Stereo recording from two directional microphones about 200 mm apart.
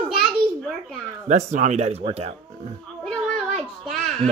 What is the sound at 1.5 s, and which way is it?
Speech, 35° right (ahead or behind).